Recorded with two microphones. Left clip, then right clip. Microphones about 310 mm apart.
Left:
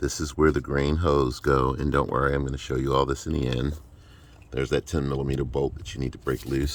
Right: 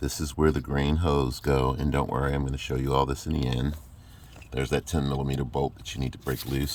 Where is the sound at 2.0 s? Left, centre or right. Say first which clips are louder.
Left 5 dB; right.